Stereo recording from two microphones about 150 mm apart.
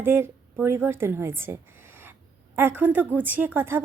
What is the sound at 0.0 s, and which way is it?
A woman's voice, 15° right (ahead or behind).